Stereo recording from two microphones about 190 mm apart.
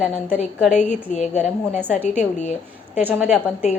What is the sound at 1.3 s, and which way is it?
Speech, 10° right (ahead or behind).